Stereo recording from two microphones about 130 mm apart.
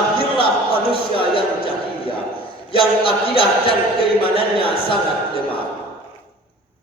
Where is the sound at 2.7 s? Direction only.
45° left (ahead or behind).